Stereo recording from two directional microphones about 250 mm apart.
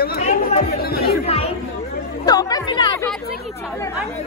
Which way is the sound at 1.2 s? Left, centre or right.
Left.